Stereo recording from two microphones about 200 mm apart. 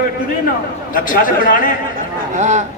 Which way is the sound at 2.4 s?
35° right (ahead or behind).